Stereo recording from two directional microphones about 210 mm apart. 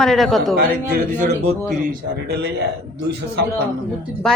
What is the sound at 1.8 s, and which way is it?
Speech, 50° right (ahead or behind).